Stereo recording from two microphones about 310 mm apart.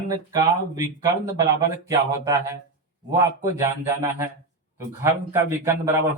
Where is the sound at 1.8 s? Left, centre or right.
Centre.